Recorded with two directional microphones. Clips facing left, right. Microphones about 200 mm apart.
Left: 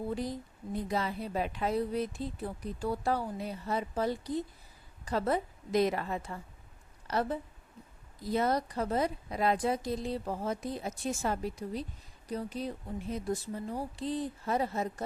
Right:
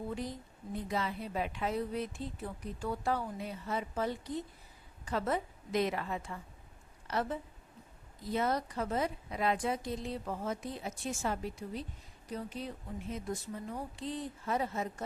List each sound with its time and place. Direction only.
0.1 s a woman's voice: 35° left (ahead or behind)